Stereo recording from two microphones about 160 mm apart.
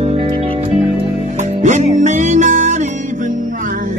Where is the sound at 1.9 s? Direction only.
50° right (ahead or behind).